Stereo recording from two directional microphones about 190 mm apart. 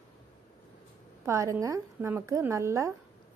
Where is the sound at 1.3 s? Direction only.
15° right (ahead or behind).